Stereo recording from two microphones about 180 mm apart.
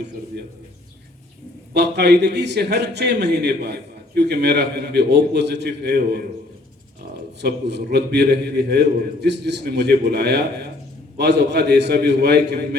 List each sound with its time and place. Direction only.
0.3 s a man's voice: 65° right (ahead or behind)
1.7 s a man's voice: 70° right (ahead or behind)
7.4 s a man's voice: 60° right (ahead or behind)